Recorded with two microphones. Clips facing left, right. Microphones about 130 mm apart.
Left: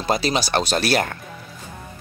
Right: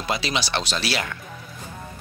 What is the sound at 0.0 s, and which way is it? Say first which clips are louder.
Speech: left 5 dB; 40° left (ahead or behind).